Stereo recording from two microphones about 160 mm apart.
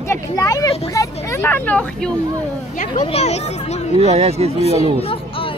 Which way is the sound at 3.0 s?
40° left (ahead or behind).